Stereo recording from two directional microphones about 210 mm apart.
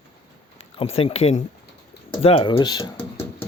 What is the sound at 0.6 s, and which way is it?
Speech, 25° left (ahead or behind).